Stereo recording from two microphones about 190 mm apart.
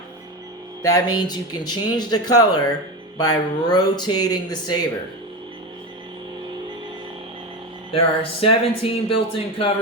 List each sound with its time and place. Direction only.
0.8 s speech: 20° left (ahead or behind)
7.9 s speech: 30° left (ahead or behind)